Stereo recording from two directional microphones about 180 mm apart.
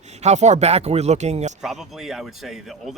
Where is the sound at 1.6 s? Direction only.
Centre (ahead or behind).